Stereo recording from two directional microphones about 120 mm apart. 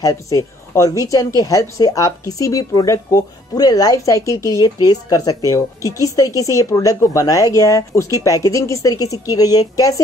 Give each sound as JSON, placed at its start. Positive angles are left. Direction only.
{"t": 0.0, "sound": "a woman's voice", "side_deg": 30}